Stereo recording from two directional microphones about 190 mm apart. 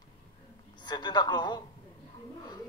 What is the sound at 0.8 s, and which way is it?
Speech, 25° left (ahead or behind).